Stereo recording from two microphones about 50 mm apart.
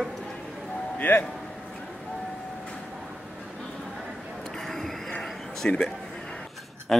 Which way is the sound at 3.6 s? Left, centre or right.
Centre.